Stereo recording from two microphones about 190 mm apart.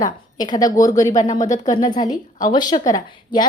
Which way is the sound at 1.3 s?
40° left (ahead or behind).